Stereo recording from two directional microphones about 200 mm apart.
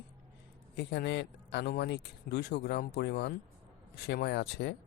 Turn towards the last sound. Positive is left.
turn(degrees=60)  # may be behind; listen again after turning